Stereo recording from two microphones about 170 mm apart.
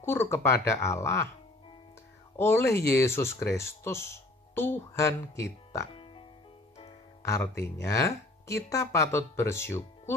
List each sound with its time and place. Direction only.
0.0 s speech: 15° left (ahead or behind)
2.3 s speech: 15° left (ahead or behind)
7.2 s speech: 20° left (ahead or behind)